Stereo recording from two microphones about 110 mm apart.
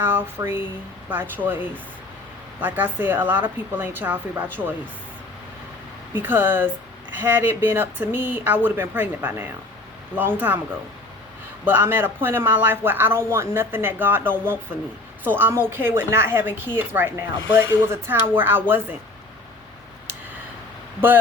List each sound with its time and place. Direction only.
0.0 s a woman's voice: 20° right (ahead or behind)
6.1 s speech: 20° right (ahead or behind)
11.6 s a woman's voice: 20° right (ahead or behind)